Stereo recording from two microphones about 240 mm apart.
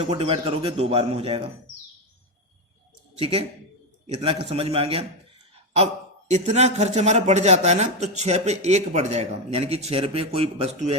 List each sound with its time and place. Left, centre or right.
0.0 s a man's voice: right
3.2 s a man's voice: right